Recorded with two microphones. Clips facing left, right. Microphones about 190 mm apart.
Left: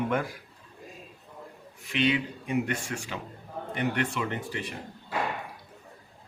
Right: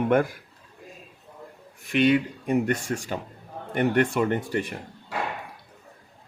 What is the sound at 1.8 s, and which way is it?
Speech, 50° right (ahead or behind).